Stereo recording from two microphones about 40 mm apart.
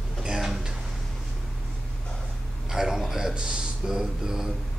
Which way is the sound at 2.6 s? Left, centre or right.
Centre.